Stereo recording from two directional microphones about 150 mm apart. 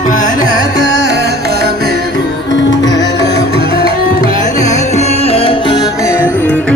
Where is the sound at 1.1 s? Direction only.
90° right.